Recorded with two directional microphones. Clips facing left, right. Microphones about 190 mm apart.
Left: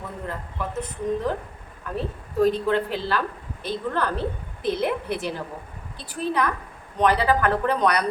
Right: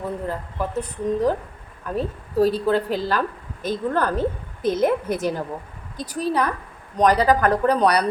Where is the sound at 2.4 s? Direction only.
35° right (ahead or behind).